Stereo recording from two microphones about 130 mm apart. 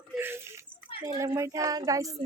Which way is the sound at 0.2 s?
20° right (ahead or behind).